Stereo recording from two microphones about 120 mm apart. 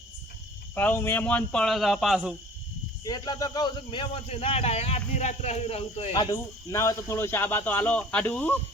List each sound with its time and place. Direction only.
0.8 s speech: 15° left (ahead or behind); by 2.3 s 5° right (ahead or behind)
3.0 s speech: 30° left (ahead or behind)
4.3 s speech: 60° left (ahead or behind)
6.3 s speech: 25° left (ahead or behind)